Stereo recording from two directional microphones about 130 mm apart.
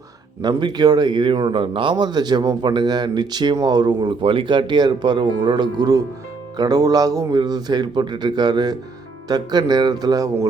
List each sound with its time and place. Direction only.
0.4 s speech: 30° right (ahead or behind)